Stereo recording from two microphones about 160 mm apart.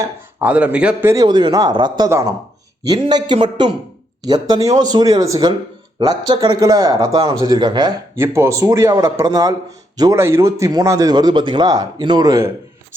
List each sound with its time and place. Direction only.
0.0 s speech: 10° right (ahead or behind)
1.1 s speech: 25° right (ahead or behind)